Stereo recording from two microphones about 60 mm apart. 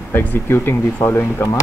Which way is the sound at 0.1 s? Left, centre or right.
Left.